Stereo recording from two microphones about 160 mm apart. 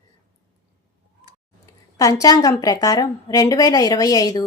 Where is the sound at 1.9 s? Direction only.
20° left (ahead or behind).